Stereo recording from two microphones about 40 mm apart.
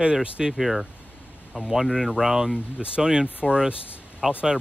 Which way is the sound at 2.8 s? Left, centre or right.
Right.